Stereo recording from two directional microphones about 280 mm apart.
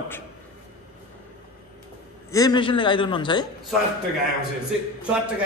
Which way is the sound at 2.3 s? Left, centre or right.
Centre.